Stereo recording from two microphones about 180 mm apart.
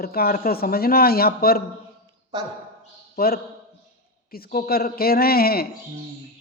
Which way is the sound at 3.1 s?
55° left (ahead or behind).